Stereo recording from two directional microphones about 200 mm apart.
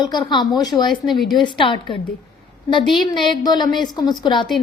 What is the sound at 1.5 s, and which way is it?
Speech, 25° left (ahead or behind).